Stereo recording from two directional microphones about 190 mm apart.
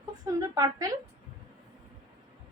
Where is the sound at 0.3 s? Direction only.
15° right (ahead or behind).